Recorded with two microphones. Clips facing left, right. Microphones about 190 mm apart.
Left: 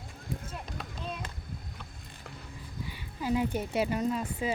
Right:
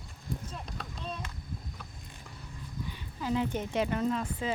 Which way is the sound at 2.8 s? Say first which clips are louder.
Left 2 dB; 10° left (ahead or behind).